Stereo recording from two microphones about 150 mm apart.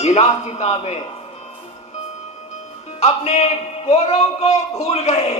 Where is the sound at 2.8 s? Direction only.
45° left (ahead or behind).